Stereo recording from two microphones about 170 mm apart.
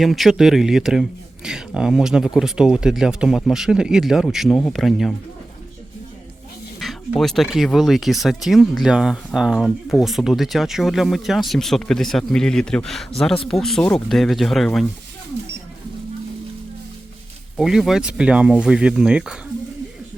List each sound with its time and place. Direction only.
0.0 s speech: centre (ahead or behind)
6.7 s speech: centre (ahead or behind)
17.6 s speech: centre (ahead or behind)